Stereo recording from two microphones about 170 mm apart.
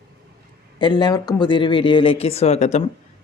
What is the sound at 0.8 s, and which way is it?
Speech, 25° left (ahead or behind).